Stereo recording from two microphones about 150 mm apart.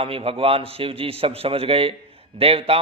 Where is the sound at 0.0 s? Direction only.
40° right (ahead or behind).